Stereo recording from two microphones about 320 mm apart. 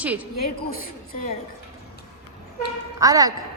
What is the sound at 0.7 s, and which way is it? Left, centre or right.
Speech, left.